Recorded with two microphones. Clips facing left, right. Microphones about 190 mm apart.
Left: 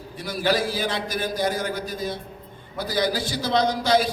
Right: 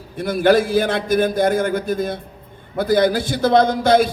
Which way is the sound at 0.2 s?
55° right (ahead or behind).